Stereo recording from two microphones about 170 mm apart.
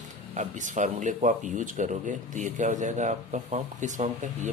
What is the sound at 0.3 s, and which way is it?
Speech, 45° right (ahead or behind).